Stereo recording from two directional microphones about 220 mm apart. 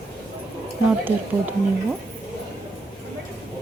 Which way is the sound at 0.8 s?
10° right (ahead or behind).